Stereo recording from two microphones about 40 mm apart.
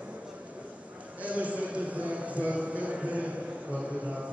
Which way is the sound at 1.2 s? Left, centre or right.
Right.